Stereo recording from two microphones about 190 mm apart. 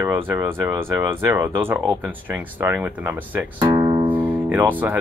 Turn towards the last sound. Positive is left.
turn(degrees=-10)  # may be behind; listen again after turning